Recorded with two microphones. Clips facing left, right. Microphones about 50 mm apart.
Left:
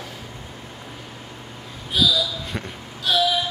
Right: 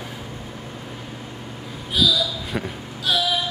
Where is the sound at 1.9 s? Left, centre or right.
Centre.